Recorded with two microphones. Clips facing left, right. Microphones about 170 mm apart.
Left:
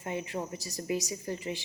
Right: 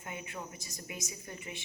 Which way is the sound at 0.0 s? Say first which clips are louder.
Left 8 dB; 30° left (ahead or behind).